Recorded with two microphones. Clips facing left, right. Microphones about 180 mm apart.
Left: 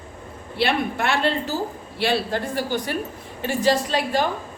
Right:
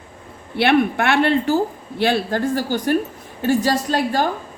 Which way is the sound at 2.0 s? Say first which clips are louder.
Right 4 dB; 50° right (ahead or behind).